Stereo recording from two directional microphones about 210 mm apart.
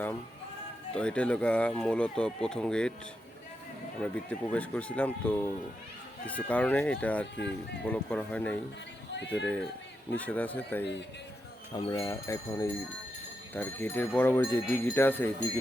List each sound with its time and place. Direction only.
0.9 s speech: 5° left (ahead or behind)
4.0 s livestock: 5° left (ahead or behind)
9.3 s speech: 5° left (ahead or behind)
10.2 s livestock: 5° left (ahead or behind)
11.7 s livestock: 20° left (ahead or behind)